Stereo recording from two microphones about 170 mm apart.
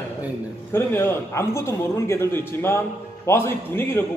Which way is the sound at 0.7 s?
15° left (ahead or behind).